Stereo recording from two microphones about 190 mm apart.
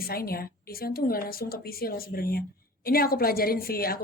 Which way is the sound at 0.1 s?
50° left (ahead or behind).